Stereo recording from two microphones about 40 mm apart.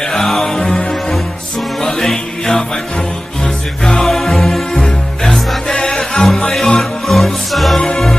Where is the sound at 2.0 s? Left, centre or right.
Centre.